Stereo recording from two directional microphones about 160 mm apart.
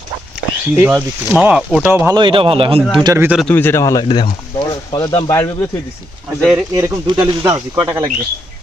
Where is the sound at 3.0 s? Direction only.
20° right (ahead or behind).